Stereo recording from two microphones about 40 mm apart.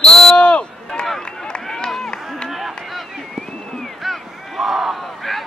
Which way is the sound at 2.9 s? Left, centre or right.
Centre.